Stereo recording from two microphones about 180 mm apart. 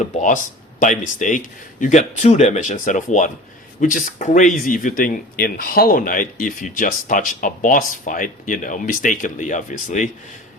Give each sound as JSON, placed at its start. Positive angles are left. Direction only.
{"t": 0.0, "sound": "speech", "side_deg": 45}